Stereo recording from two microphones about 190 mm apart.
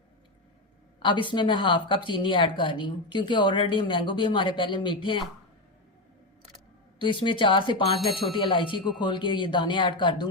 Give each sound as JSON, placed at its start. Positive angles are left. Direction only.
{"t": 0.9, "sound": "a sound", "side_deg": 25}
{"t": 1.3, "sound": "a woman's voice", "side_deg": 25}
{"t": 7.0, "sound": "a woman's voice", "side_deg": 25}
{"t": 7.9, "sound": "speech", "side_deg": 0}
{"t": 8.3, "sound": "a woman's voice", "side_deg": 25}